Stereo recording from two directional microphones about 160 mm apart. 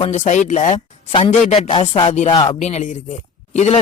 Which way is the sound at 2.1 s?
45° left (ahead or behind).